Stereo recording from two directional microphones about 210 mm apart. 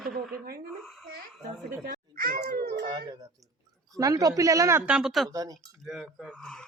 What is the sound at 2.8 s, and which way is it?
Speech, 20° right (ahead or behind).